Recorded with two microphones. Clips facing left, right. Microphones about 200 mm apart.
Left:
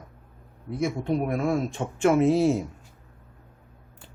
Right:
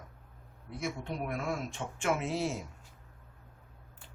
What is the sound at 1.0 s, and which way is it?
Speech, 45° left (ahead or behind).